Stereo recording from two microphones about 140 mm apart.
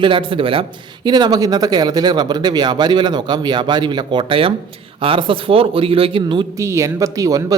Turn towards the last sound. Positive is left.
turn(degrees=-25)  # may be behind; listen again after turning